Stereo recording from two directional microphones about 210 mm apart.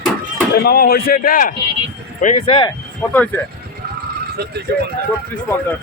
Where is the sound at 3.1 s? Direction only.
10° left (ahead or behind).